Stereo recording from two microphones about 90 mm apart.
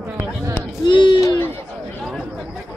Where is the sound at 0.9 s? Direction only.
60° left (ahead or behind).